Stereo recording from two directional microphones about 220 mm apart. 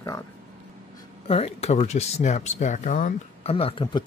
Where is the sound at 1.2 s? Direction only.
25° left (ahead or behind).